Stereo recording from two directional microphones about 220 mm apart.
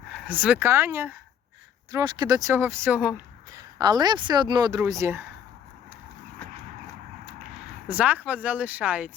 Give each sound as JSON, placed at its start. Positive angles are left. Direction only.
{"t": 0.1, "sound": "speech", "side_deg": -5}
{"t": 3.8, "sound": "speech", "side_deg": -20}
{"t": 7.9, "sound": "speech", "side_deg": -5}